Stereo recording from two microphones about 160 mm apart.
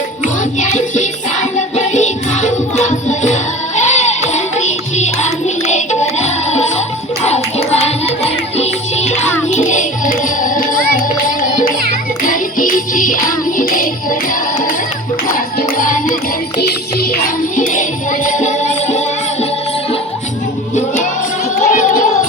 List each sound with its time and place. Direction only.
0.6 s music: 50° left (ahead or behind)
16.6 s music: 70° left (ahead or behind); by 19.5 s 45° left (ahead or behind)
21.6 s music: 50° left (ahead or behind)